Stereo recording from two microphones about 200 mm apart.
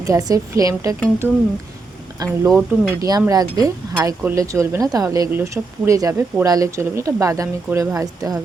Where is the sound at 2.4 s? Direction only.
5° right (ahead or behind).